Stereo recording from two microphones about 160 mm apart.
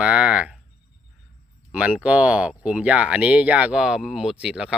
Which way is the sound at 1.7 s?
5° right (ahead or behind).